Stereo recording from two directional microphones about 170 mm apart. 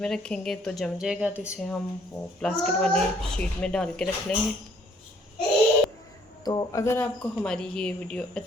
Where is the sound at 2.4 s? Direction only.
5° left (ahead or behind).